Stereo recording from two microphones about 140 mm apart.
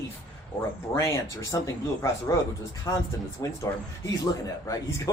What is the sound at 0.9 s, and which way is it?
Speech, 20° left (ahead or behind).